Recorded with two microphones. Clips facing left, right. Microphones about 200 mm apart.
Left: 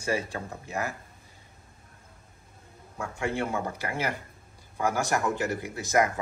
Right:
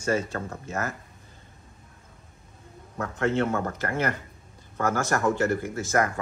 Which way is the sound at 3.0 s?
10° left (ahead or behind).